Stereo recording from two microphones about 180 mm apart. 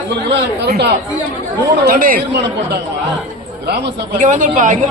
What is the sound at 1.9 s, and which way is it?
Speech, 50° right (ahead or behind).